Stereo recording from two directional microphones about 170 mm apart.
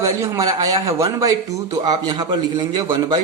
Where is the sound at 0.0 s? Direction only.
20° right (ahead or behind).